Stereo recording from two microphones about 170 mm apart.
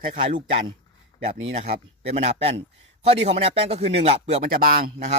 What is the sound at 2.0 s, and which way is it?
Speech, 35° right (ahead or behind).